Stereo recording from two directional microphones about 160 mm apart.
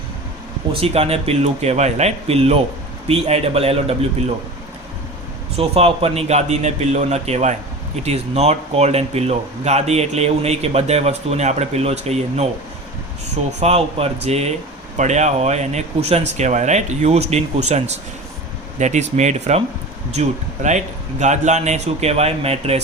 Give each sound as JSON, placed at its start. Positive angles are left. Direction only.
{"t": 0.7, "sound": "speech", "side_deg": -40}
{"t": 5.5, "sound": "speech", "side_deg": -40}
{"t": 13.6, "sound": "speech", "side_deg": -40}